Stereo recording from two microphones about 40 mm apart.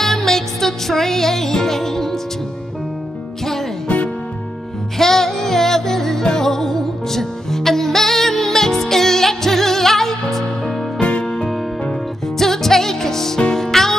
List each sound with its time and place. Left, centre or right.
0.0 s music: centre
4.9 s music: centre
11.0 s music: left
12.4 s music: centre